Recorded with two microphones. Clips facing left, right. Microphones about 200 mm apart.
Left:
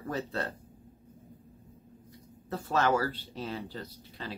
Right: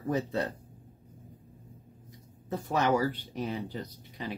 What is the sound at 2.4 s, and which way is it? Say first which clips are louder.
Speech: even; 15° right (ahead or behind).